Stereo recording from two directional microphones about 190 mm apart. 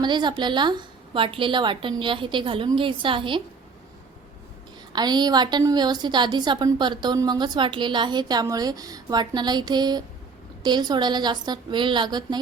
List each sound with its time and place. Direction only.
0.0 s a woman's voice: 25° right (ahead or behind)
4.9 s a woman's voice: 20° right (ahead or behind)